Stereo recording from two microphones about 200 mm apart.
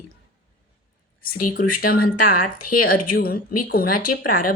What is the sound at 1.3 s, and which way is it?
Speech, 45° left (ahead or behind).